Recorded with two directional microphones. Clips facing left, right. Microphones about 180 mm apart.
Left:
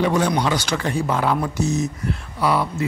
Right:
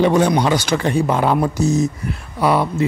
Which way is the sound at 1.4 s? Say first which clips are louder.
Right 5 dB; 35° right (ahead or behind).